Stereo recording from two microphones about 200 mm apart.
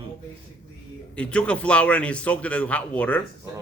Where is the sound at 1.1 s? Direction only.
5° left (ahead or behind).